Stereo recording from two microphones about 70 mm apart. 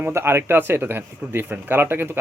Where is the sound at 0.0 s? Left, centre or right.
Right.